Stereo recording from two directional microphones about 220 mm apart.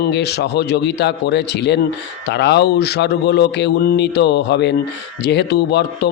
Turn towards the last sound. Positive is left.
turn(degrees=50)  # may be behind; listen again after turning